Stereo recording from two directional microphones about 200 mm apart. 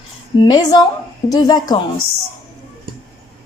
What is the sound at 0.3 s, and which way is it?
A woman's voice, 20° left (ahead or behind).